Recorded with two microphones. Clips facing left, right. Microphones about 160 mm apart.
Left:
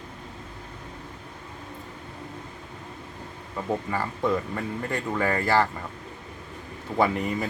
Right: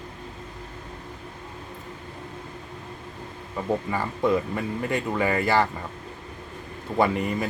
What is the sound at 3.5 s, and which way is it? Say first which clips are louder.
Speech: right 2 dB; 5° right (ahead or behind).